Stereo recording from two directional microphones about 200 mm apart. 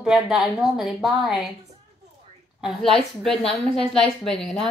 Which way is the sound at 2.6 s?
Centre (ahead or behind).